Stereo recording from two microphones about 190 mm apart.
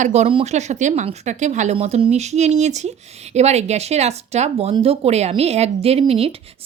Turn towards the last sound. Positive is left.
turn(degrees=-30)  # may be behind; listen again after turning